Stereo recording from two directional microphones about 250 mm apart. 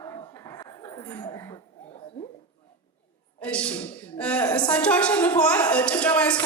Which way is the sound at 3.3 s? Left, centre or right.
Centre.